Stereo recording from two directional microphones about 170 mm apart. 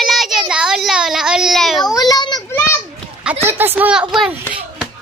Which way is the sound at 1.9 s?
25° left (ahead or behind).